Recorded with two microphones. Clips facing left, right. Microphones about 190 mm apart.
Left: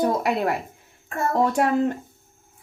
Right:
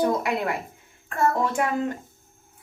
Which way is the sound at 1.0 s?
40° left (ahead or behind).